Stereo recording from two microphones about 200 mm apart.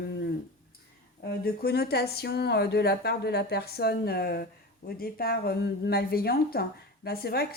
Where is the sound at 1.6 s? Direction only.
55° left (ahead or behind).